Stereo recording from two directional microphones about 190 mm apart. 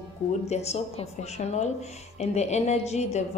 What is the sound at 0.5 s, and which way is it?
A woman's voice, 35° left (ahead or behind).